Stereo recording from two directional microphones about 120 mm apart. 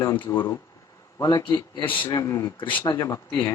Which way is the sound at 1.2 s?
25° left (ahead or behind).